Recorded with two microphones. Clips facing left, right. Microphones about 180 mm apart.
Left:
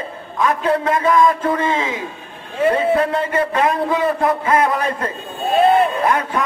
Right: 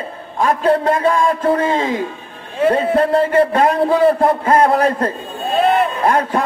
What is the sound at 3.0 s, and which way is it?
A man's voice, 35° right (ahead or behind).